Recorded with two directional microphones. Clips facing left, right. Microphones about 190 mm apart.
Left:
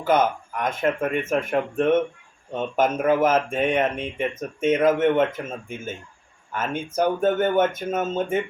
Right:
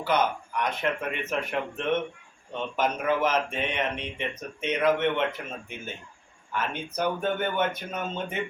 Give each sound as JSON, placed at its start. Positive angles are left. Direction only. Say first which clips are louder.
{"t": 0.0, "sound": "speech", "louder": "left 5 dB", "side_deg": 50}